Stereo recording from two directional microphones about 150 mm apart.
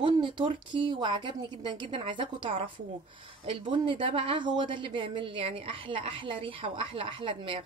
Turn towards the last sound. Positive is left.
turn(degrees=-35)  # may be behind; listen again after turning